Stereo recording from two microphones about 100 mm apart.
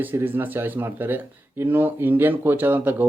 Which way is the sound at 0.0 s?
20° right (ahead or behind).